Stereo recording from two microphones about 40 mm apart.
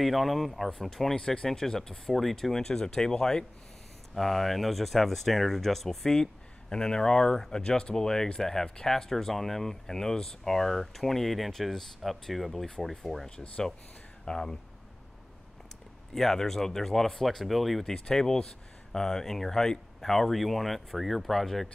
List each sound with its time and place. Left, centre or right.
0.0 s speech: centre
0.7 s speech: centre
4.1 s speech: centre
6.7 s speech: centre
16.2 s speech: centre
17.8 s speech: centre